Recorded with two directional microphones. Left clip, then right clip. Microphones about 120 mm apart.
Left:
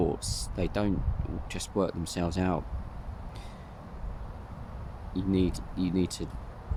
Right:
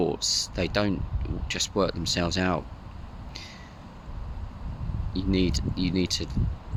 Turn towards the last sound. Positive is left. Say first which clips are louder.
# right 4 dB
turn(degrees=15)  # may be behind; listen again after turning